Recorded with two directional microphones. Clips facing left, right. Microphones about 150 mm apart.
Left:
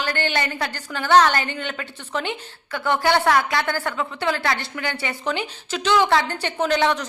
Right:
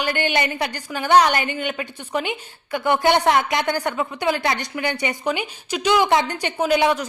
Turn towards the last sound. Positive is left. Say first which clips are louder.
# right 2 dB
turn(degrees=-10)  # may be behind; listen again after turning